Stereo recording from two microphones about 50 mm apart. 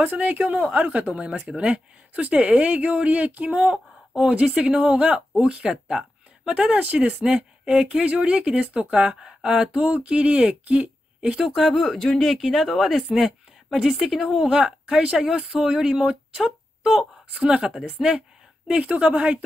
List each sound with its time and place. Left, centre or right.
0.0 s speech: right
4.6 s speech: centre
6.5 s speech: right
11.3 s speech: centre
14.5 s speech: centre
18.0 s speech: centre
18.8 s speech: right